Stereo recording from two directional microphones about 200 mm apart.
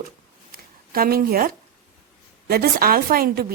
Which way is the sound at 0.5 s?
45° right (ahead or behind).